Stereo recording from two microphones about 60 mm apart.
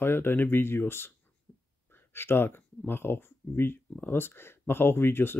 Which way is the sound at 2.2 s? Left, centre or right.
Left.